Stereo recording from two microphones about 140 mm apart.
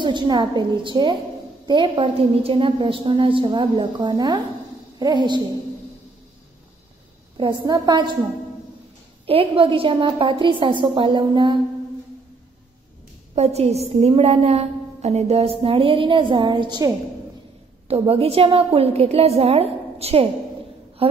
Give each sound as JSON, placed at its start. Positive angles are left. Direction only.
{"t": 0.0, "sound": "a woman's voice", "side_deg": -30}
{"t": 7.3, "sound": "a woman's voice", "side_deg": -30}
{"t": 9.2, "sound": "a woman's voice", "side_deg": -40}
{"t": 13.3, "sound": "a woman's voice", "side_deg": -50}
{"t": 17.8, "sound": "a woman's voice", "side_deg": -45}